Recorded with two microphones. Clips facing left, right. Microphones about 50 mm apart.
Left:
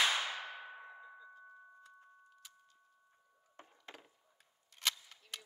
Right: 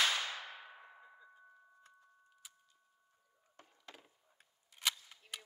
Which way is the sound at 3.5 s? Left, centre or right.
Left.